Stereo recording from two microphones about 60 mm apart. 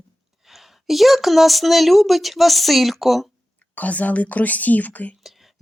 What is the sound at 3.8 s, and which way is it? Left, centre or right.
Speech, left.